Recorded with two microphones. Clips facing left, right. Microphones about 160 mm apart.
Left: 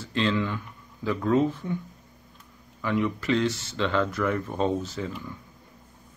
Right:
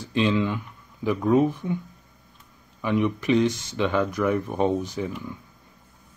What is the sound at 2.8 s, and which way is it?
Speech, 20° right (ahead or behind).